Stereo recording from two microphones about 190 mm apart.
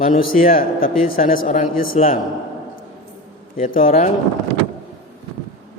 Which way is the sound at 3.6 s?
45° left (ahead or behind).